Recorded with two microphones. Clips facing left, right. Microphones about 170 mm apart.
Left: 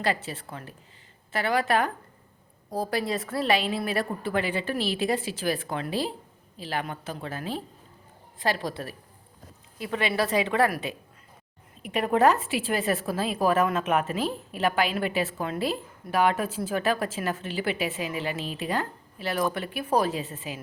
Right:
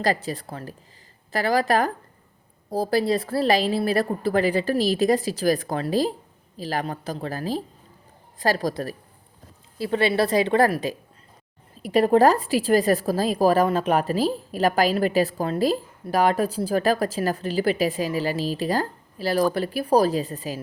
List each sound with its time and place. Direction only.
0.0 s a woman's voice: 40° right (ahead or behind)